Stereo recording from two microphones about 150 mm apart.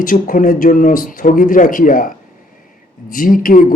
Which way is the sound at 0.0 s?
65° left (ahead or behind).